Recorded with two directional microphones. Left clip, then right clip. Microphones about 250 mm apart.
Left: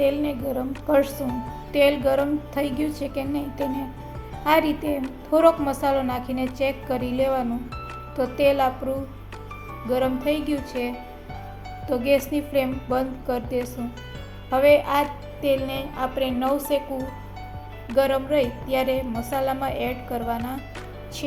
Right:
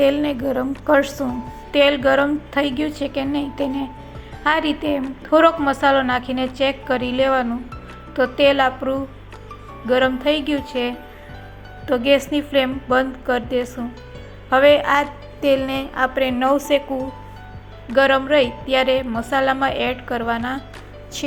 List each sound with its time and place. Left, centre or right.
0.0 s a woman's voice: right
9.9 s a woman's voice: centre
11.9 s a woman's voice: centre
17.9 s a woman's voice: centre